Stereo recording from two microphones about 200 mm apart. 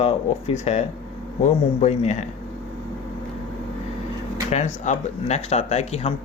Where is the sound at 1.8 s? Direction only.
35° left (ahead or behind).